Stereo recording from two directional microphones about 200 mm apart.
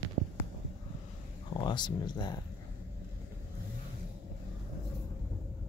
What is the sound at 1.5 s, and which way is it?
Speech, 20° left (ahead or behind).